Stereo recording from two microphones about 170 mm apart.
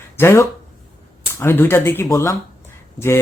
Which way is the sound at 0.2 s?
15° left (ahead or behind).